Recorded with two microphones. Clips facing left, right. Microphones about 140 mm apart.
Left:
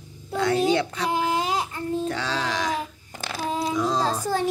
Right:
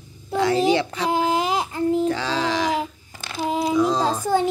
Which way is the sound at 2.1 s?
Centre (ahead or behind).